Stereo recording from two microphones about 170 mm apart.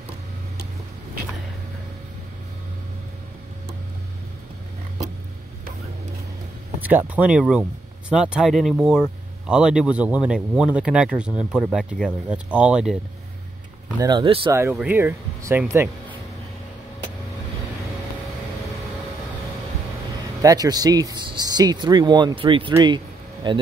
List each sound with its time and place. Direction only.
6.8 s speech: 10° right (ahead or behind)
13.9 s speech: 25° right (ahead or behind)
14.5 s speech: 15° right (ahead or behind)
20.4 s speech: 20° right (ahead or behind)
22.8 s a sound: 25° right (ahead or behind)